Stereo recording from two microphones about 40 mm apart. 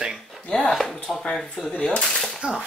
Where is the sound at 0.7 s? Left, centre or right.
Centre.